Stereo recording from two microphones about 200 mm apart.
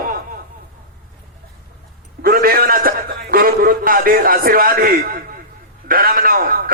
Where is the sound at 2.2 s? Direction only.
50° right (ahead or behind).